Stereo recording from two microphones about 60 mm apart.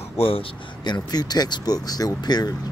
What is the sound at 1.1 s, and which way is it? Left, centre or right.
Speech, left.